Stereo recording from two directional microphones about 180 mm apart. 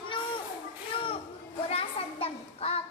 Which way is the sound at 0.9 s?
30° left (ahead or behind).